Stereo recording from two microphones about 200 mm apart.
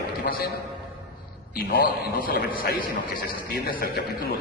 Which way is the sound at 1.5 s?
50° left (ahead or behind).